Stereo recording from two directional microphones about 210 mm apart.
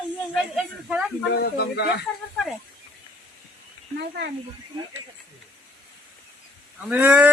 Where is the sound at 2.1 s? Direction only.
5° left (ahead or behind).